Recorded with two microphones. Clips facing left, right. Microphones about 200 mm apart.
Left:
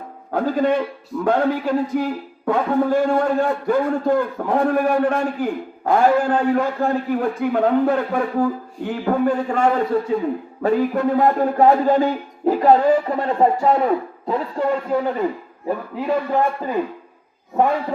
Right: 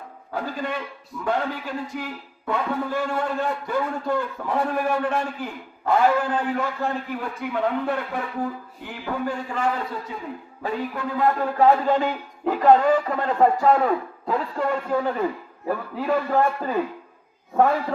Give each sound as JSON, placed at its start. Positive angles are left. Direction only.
{"t": 0.3, "sound": "a man's voice", "side_deg": 50}